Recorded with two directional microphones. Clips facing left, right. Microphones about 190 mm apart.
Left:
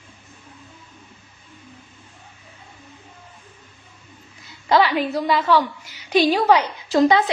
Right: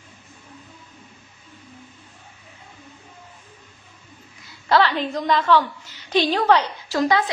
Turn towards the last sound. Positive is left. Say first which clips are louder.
# left 4 dB
turn(degrees=20)  # may be behind; listen again after turning